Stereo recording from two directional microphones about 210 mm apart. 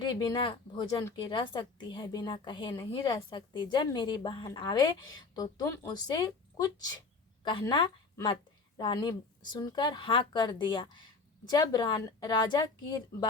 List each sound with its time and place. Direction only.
0.0 s a woman's voice: 20° left (ahead or behind)